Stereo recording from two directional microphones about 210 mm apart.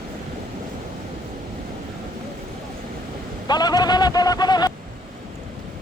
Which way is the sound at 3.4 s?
20° left (ahead or behind).